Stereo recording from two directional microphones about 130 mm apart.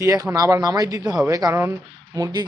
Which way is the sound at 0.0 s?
25° right (ahead or behind).